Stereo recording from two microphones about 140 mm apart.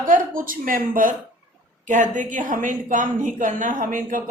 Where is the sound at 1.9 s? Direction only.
65° right (ahead or behind).